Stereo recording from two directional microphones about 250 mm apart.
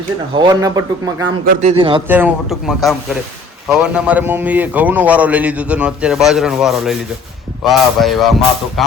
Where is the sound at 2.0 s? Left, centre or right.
Centre.